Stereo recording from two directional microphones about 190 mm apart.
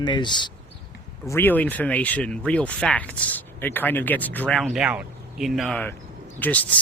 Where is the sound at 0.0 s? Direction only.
25° left (ahead or behind).